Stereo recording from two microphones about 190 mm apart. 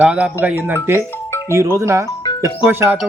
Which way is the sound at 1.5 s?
15° right (ahead or behind).